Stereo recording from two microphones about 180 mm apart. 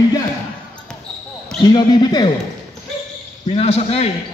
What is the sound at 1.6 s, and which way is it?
Speech, 25° left (ahead or behind).